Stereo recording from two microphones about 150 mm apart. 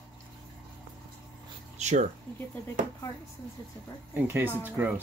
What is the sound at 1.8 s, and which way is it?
Speech, 50° right (ahead or behind).